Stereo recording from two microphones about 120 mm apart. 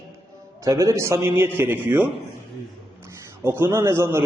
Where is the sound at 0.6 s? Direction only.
30° right (ahead or behind).